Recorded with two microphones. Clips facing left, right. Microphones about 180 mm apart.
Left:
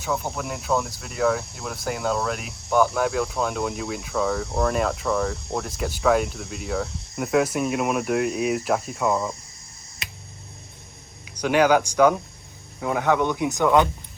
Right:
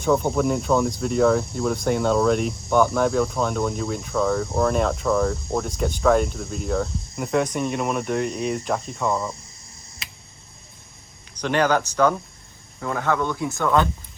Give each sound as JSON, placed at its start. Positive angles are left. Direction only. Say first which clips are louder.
{"t": 0.0, "sound": "speech", "louder": "right 8 dB", "side_deg": 5}
{"t": 11.3, "sound": "speech", "louder": "left 2 dB", "side_deg": 10}